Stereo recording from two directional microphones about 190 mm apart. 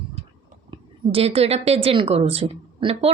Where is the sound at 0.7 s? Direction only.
25° right (ahead or behind).